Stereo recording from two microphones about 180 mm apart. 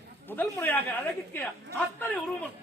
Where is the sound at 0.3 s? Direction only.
10° left (ahead or behind).